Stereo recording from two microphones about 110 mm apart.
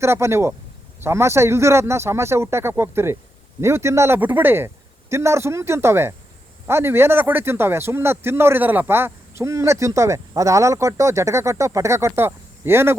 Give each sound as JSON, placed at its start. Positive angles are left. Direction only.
{"t": 0.0, "sound": "speech", "side_deg": -25}